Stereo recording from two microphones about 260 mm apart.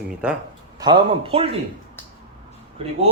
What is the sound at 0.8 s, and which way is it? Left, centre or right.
Speech, centre.